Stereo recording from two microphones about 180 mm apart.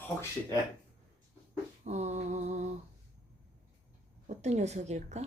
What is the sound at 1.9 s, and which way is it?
Speech, 40° right (ahead or behind).